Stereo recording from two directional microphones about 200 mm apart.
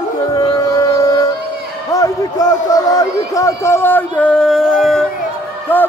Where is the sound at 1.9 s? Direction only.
15° left (ahead or behind).